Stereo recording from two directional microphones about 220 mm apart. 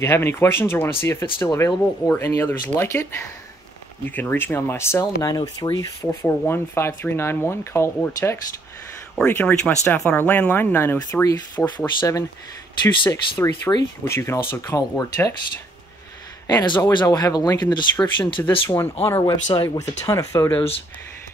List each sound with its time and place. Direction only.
0.0 s speech: 10° left (ahead or behind)
16.4 s speech: 20° left (ahead or behind)
19.5 s speech: 20° left (ahead or behind)